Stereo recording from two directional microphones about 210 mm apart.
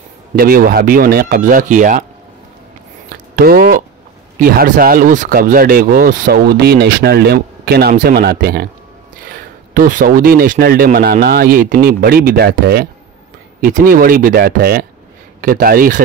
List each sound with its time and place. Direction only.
0.4 s speech: 45° right (ahead or behind)
3.3 s speech: 45° right (ahead or behind)